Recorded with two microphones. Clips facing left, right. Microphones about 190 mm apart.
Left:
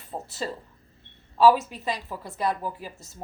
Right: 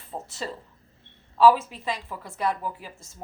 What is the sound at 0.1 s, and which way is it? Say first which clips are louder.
Speech: left 1 dB; 10° left (ahead or behind).